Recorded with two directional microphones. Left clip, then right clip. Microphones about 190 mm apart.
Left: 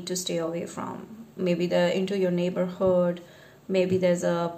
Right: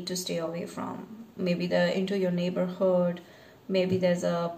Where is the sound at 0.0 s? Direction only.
20° left (ahead or behind).